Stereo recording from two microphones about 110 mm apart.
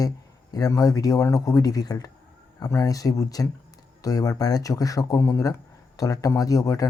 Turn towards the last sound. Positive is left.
turn(degrees=30)  # may be behind; listen again after turning